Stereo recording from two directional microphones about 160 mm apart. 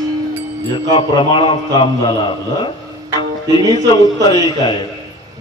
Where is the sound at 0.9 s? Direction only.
30° left (ahead or behind).